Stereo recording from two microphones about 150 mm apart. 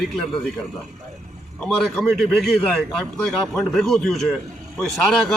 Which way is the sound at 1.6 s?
10° left (ahead or behind).